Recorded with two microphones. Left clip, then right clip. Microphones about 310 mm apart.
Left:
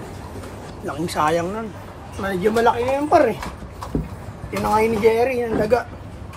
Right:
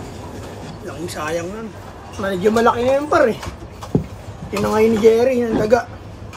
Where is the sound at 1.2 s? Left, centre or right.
Centre.